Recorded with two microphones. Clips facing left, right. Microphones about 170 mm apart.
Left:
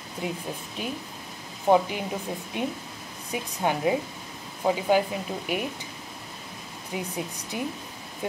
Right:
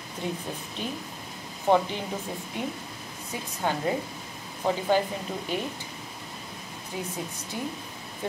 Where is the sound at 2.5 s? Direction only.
20° left (ahead or behind).